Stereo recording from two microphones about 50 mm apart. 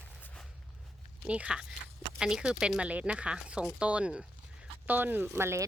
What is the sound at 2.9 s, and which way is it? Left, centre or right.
A woman's voice, right.